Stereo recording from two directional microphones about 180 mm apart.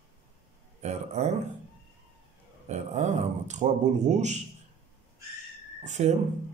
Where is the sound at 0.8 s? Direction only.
35° right (ahead or behind).